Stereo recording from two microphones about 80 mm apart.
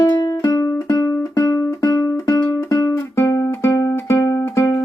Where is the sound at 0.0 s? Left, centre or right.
Left.